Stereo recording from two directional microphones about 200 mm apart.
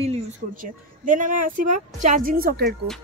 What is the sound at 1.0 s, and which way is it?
Speech, 40° right (ahead or behind).